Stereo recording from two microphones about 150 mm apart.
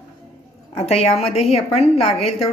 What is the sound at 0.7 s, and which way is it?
A woman's voice, 40° left (ahead or behind).